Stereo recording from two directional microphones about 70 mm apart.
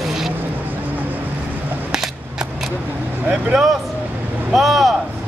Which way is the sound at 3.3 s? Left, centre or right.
Centre.